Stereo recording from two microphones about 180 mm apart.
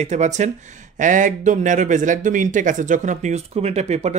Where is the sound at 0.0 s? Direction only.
40° right (ahead or behind).